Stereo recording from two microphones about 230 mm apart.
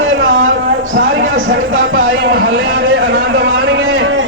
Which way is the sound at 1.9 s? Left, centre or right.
Right.